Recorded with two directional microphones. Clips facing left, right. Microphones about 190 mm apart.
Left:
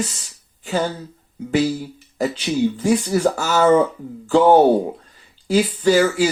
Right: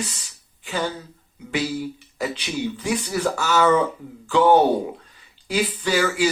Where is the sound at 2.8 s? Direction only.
40° left (ahead or behind).